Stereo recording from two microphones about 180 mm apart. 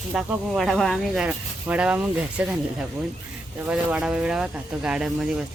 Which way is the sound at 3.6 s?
5° right (ahead or behind).